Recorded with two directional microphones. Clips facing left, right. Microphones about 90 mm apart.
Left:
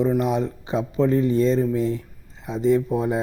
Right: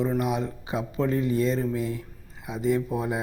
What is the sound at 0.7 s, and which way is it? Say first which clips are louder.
Speech: left 6 dB; 25° left (ahead or behind).